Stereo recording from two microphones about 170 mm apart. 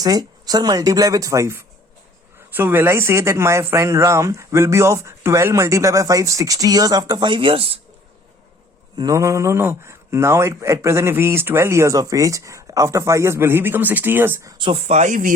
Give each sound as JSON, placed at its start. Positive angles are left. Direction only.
{"t": 0.0, "sound": "speech", "side_deg": -25}
{"t": 9.0, "sound": "speech", "side_deg": -20}
{"t": 14.6, "sound": "speech", "side_deg": -35}